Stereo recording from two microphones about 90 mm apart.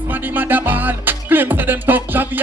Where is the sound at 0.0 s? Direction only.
20° right (ahead or behind).